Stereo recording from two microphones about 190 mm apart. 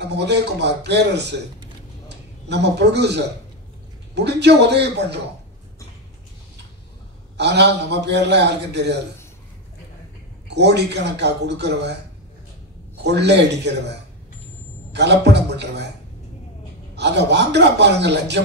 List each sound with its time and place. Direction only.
0.1 s a man's voice: 60° right (ahead or behind)
7.3 s a man's voice: 65° right (ahead or behind)
10.5 s a man's voice: 65° right (ahead or behind)
13.0 s a man's voice: 65° right (ahead or behind)
16.9 s a man's voice: 65° right (ahead or behind)